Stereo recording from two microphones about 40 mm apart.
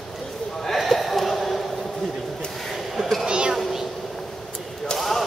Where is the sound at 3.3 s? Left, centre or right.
Right.